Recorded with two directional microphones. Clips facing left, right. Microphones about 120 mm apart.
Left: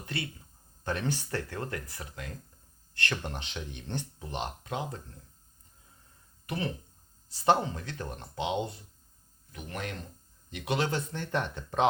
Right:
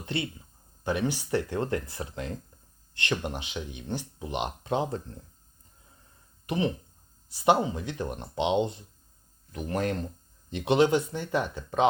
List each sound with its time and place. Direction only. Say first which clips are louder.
0.0 s speech: right 5 dB; 25° right (ahead or behind)
0.9 s speech: right 5 dB; 10° right (ahead or behind)
4.6 s speech: right 7 dB; 30° right (ahead or behind)
6.4 s speech: right 6 dB; 20° right (ahead or behind)
9.5 s speech: right 9 dB; 35° right (ahead or behind)
10.5 s speech: right 8 dB; 25° right (ahead or behind); by 11.9 s centre (ahead or behind)